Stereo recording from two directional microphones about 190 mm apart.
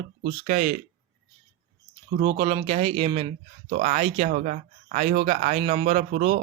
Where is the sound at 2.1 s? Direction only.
30° right (ahead or behind).